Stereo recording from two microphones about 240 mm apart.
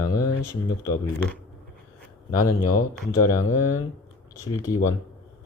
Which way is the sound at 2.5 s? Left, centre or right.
Left.